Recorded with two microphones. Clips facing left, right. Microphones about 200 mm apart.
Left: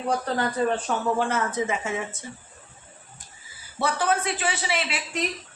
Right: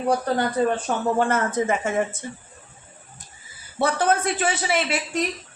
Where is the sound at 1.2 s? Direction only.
50° right (ahead or behind).